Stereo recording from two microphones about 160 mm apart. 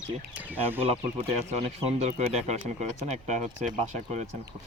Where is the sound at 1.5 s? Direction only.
40° right (ahead or behind).